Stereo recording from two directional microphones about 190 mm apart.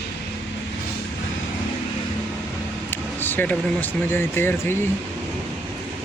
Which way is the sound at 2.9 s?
10° left (ahead or behind).